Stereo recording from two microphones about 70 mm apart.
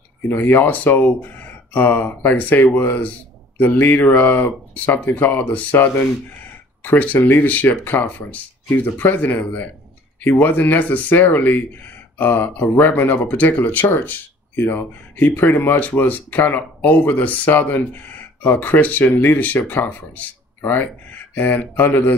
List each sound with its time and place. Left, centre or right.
0.3 s speech: left